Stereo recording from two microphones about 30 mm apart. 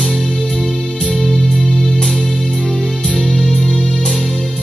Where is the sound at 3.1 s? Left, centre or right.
Left.